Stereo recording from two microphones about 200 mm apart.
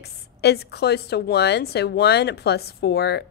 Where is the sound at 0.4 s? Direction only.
55° left (ahead or behind).